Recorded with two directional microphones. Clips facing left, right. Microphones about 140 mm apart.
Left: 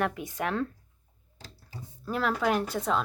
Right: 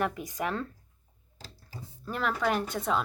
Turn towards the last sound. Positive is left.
turn(degrees=0)  # may be behind; listen again after turning